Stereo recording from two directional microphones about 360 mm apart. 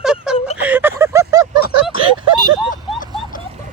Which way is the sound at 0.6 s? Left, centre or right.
Centre.